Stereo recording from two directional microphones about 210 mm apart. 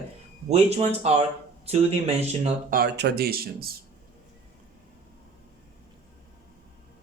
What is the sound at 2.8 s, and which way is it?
Speech, 50° right (ahead or behind).